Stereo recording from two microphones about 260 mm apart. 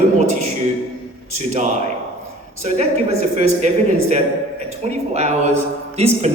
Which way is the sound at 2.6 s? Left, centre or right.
Right.